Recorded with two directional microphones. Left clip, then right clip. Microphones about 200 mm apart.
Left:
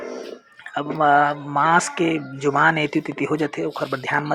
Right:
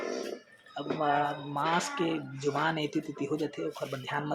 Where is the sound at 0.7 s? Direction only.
25° left (ahead or behind).